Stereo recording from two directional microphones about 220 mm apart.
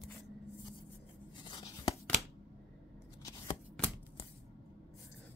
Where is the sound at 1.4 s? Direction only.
20° left (ahead or behind).